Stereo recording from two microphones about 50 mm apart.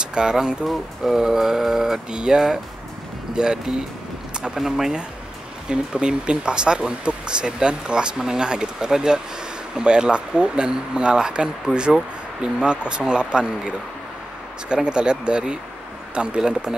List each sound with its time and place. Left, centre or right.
0.0 s speech: centre
5.7 s speech: centre
12.6 s speech: centre